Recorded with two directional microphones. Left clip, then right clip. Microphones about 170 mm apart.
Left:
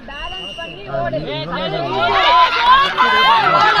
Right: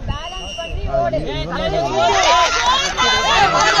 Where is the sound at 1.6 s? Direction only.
60° right (ahead or behind); by 3.7 s 90° right.